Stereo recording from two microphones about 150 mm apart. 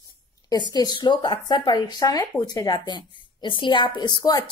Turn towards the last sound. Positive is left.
turn(degrees=25)  # may be behind; listen again after turning